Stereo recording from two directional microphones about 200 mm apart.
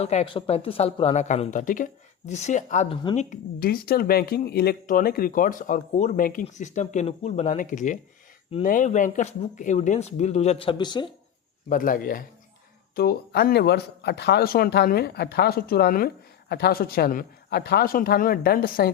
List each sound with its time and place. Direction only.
0.0 s speech: 35° left (ahead or behind)
11.7 s speech: 45° left (ahead or behind)